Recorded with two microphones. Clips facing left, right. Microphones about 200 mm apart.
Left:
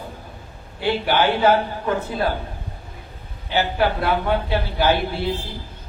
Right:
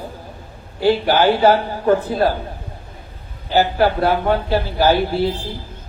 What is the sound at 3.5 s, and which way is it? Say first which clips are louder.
Speech: right 5 dB; 40° right (ahead or behind).